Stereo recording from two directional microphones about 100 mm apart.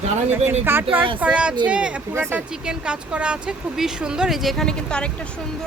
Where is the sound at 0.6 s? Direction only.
20° right (ahead or behind).